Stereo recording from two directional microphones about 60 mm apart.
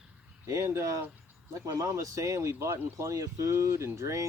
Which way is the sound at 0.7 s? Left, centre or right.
Right.